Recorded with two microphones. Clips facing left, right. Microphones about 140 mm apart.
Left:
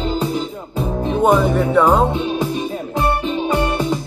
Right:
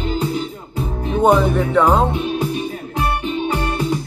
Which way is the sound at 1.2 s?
10° left (ahead or behind).